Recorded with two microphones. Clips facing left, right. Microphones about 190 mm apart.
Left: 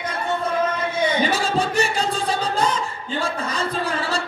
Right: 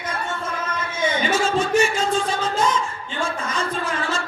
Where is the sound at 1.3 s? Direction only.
35° left (ahead or behind).